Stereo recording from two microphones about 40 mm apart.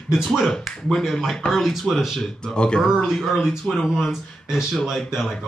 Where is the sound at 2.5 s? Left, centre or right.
Left.